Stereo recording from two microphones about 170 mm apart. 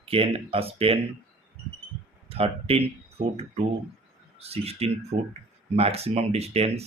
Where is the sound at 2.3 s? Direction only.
35° right (ahead or behind).